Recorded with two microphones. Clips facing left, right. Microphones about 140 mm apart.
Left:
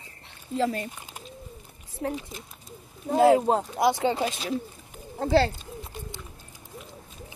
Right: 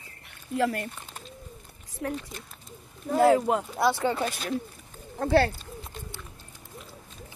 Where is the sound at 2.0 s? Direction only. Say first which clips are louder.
Left 1 dB; 30° left (ahead or behind).